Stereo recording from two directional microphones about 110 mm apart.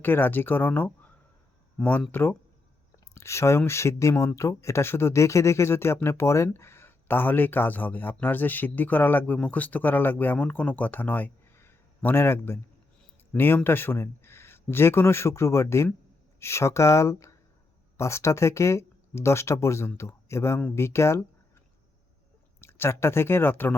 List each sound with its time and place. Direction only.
0.0 s speech: 20° left (ahead or behind)
2.9 s a sound: 25° left (ahead or behind)
3.7 s a man's voice: 25° left (ahead or behind)
22.6 s speech: 25° left (ahead or behind)